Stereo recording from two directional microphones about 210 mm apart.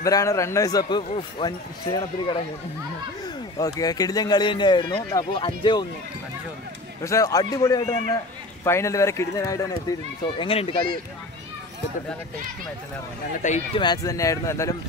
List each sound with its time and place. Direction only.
0.0 s speech: 15° left (ahead or behind)
3.5 s a man's voice: 20° left (ahead or behind)
7.0 s a man's voice: 15° left (ahead or behind)
13.4 s speech: 35° left (ahead or behind)
13.7 s speech: 20° left (ahead or behind)